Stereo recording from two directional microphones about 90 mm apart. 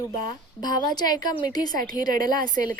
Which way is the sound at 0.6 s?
50° left (ahead or behind).